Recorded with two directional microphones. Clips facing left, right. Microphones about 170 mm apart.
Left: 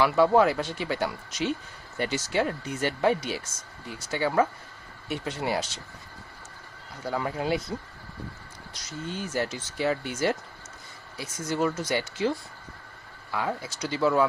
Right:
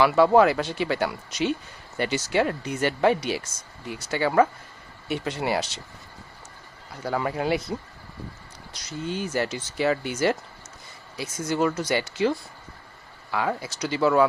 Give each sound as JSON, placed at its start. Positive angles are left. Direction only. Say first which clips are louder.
{"t": 0.0, "sound": "speech", "louder": "right 3 dB", "side_deg": -75}
{"t": 7.1, "sound": "speech", "louder": "right 3 dB", "side_deg": -70}
{"t": 8.7, "sound": "speech", "louder": "right 5 dB", "side_deg": -75}
{"t": 13.3, "sound": "speech", "louder": "right 3 dB", "side_deg": -70}